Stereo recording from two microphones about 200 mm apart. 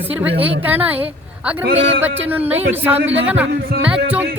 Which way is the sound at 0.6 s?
10° right (ahead or behind).